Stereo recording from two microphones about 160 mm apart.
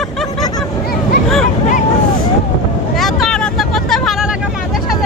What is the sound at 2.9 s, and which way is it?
Vehicle, centre (ahead or behind).